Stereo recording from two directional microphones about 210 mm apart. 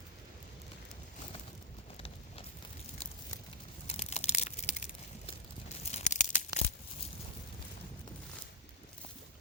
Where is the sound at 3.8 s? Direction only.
30° left (ahead or behind).